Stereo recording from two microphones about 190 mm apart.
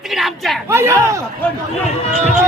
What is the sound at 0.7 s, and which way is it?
Speech, 15° right (ahead or behind).